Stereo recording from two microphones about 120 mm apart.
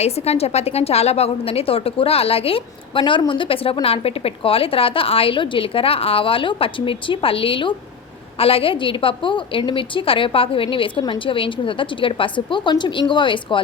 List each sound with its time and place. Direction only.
0.0 s a woman's voice: 60° left (ahead or behind)
3.0 s a woman's voice: 40° left (ahead or behind)